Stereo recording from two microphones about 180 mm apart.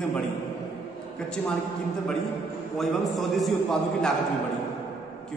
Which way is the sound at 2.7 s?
Centre (ahead or behind).